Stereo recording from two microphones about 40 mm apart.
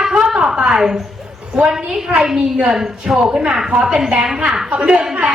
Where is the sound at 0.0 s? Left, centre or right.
Centre.